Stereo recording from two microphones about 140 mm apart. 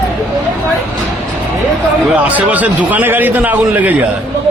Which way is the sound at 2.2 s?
10° right (ahead or behind).